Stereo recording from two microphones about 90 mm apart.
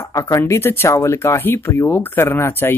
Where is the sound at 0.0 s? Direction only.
35° left (ahead or behind).